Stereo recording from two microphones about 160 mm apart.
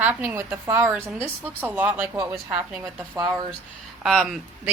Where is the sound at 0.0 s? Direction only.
10° right (ahead or behind).